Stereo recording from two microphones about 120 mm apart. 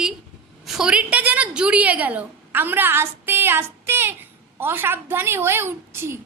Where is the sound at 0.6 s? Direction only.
5° right (ahead or behind).